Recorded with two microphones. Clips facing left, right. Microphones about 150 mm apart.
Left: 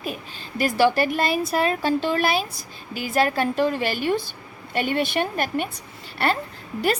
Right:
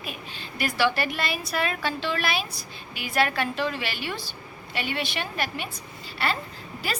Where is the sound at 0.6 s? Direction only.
40° left (ahead or behind).